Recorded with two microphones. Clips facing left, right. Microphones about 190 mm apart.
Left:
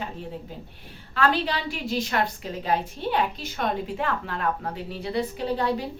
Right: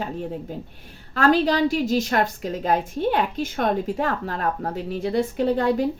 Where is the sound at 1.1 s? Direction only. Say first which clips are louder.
Right 6 dB; 45° right (ahead or behind).